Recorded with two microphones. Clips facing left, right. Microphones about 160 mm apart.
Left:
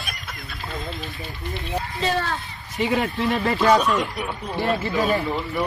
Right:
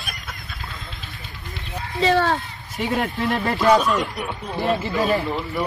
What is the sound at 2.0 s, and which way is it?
Speech, 90° right.